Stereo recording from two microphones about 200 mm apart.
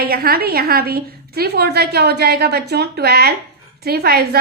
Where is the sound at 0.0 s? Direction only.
50° right (ahead or behind).